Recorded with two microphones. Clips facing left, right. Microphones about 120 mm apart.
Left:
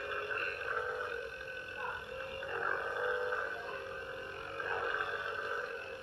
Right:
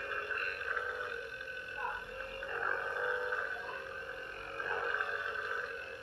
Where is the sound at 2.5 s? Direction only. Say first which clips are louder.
Even; 10° left (ahead or behind).